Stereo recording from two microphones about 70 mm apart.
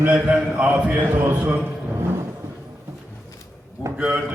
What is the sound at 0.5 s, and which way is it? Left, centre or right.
A man's voice, centre.